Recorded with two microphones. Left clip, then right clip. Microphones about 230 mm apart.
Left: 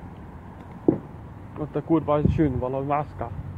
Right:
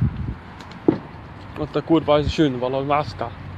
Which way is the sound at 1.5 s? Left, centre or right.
Centre.